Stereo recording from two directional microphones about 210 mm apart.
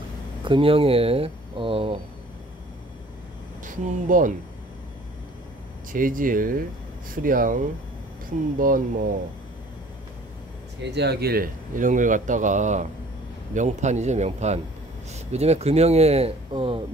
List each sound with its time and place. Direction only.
0.4 s speech: 25° right (ahead or behind)
3.6 s speech: 40° right (ahead or behind)
5.9 s speech: 40° right (ahead or behind)
10.8 s speech: 55° right (ahead or behind); by 16.8 s 25° right (ahead or behind)